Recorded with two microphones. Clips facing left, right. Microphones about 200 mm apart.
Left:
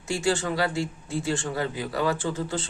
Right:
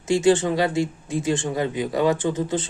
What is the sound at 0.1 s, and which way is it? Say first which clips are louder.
Speech: right 8 dB; 20° right (ahead or behind).